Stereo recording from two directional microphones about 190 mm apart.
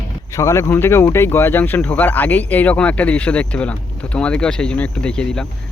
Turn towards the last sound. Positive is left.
turn(degrees=5)  # may be behind; listen again after turning